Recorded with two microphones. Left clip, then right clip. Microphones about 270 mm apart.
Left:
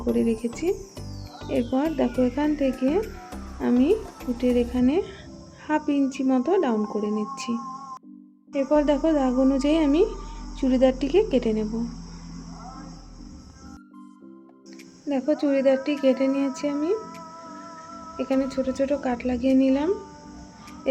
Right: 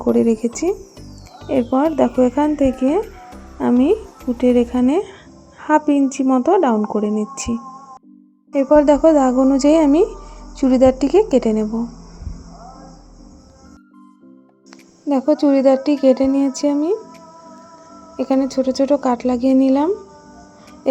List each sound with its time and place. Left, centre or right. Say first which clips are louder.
0.1 s a woman's voice: right 8 dB; centre
15.1 s a woman's voice: right 8 dB; right
18.2 s a woman's voice: right 7 dB; right